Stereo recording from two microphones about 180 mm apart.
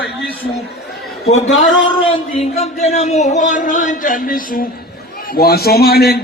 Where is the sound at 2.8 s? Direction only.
35° left (ahead or behind).